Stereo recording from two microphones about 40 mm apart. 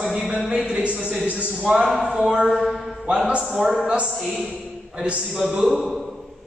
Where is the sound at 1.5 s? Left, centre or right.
Centre.